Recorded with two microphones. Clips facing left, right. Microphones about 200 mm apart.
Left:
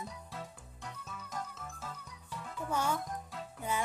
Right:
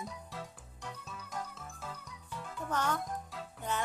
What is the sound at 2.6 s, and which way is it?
Music, 10° left (ahead or behind).